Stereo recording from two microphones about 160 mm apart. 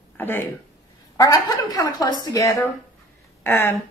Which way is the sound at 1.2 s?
25° left (ahead or behind).